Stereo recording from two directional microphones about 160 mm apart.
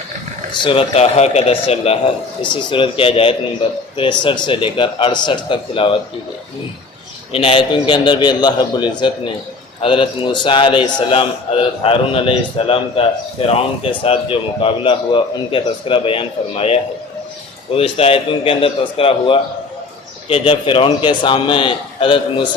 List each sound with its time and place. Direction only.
0.6 s a man's voice: 35° left (ahead or behind)
7.3 s a man's voice: 35° left (ahead or behind)
17.7 s a man's voice: 40° left (ahead or behind)